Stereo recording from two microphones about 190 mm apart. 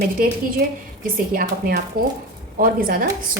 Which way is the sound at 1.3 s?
50° right (ahead or behind).